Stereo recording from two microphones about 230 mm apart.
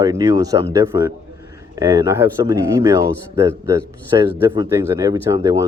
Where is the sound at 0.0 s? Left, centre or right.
Centre.